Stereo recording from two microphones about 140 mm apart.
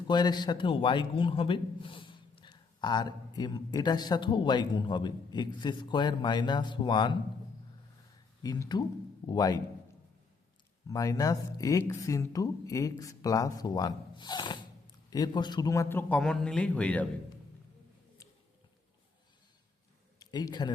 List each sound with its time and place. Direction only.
0.1 s a man's voice: 30° left (ahead or behind)
8.4 s speech: 25° left (ahead or behind)
10.8 s a man's voice: 25° left (ahead or behind); by 17.1 s 10° left (ahead or behind)
20.1 s a man's voice: 25° left (ahead or behind)